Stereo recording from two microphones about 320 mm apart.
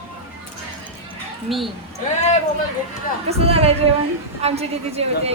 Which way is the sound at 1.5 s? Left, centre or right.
Centre.